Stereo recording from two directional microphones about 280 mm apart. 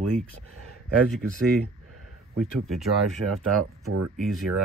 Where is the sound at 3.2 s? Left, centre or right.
Right.